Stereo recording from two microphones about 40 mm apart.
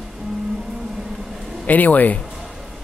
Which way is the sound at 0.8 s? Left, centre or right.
Centre.